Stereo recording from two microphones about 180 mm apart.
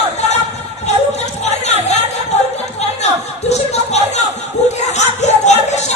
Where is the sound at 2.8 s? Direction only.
35° left (ahead or behind).